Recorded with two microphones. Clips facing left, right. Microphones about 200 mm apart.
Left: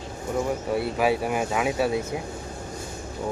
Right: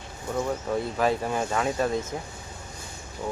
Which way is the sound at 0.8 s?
10° left (ahead or behind).